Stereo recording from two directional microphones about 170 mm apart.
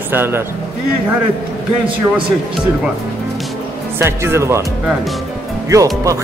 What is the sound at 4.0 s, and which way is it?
Speech, 15° right (ahead or behind).